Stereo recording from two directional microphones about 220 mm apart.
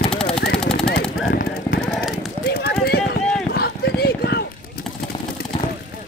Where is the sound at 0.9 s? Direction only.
45° left (ahead or behind).